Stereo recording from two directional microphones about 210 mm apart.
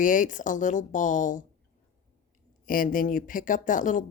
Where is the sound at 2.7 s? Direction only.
40° left (ahead or behind).